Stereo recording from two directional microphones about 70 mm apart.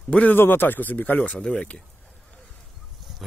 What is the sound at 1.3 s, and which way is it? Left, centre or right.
Speech, centre.